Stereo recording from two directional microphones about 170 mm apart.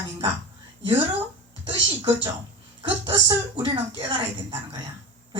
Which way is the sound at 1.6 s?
30° right (ahead or behind).